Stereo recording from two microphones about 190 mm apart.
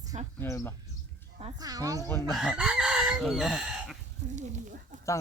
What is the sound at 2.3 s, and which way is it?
Speech, centre (ahead or behind).